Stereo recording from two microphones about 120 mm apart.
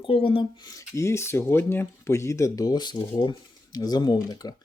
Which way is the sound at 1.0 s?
25° left (ahead or behind).